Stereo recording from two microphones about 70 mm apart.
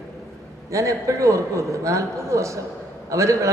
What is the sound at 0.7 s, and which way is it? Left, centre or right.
A man's voice, right.